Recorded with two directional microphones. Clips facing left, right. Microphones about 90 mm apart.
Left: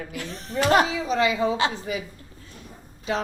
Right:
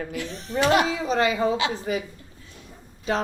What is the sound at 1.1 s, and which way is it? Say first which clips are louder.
Speech: even; 40° right (ahead or behind).